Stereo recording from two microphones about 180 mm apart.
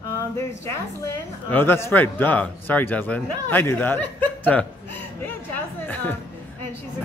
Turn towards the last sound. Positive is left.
turn(degrees=10)  # may be behind; listen again after turning